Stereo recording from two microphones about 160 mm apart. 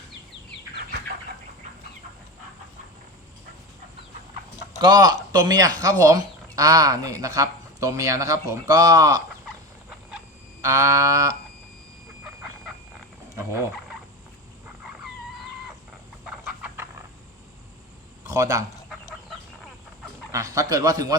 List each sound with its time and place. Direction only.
4.8 s speech: 25° right (ahead or behind)
10.6 s speech: 20° right (ahead or behind)
12.2 s a sound: 5° right (ahead or behind)
16.2 s chicken: 10° right (ahead or behind)
18.3 s a man's voice: 20° right (ahead or behind)
20.3 s speech: 20° right (ahead or behind)